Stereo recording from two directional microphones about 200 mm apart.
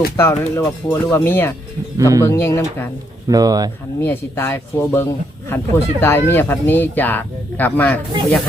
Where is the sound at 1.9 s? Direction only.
15° right (ahead or behind).